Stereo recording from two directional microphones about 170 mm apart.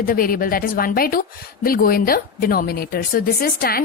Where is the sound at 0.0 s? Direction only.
60° left (ahead or behind).